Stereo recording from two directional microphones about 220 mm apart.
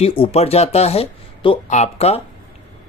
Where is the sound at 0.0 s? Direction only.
25° left (ahead or behind).